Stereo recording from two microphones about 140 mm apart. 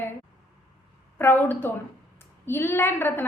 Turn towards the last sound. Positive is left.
turn(degrees=15)  # may be behind; listen again after turning